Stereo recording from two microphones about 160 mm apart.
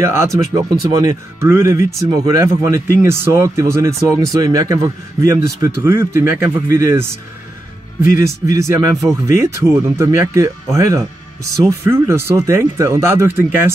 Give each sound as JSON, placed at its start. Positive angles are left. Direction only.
{"t": 0.0, "sound": "speech", "side_deg": -15}